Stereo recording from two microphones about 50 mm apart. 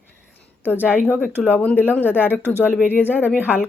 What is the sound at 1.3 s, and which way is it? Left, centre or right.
Speech, right.